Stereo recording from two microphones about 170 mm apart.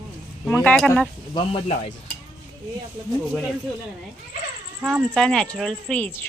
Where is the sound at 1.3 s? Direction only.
30° left (ahead or behind).